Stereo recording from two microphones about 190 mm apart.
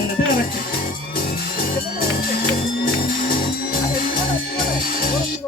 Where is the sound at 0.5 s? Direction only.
50° left (ahead or behind).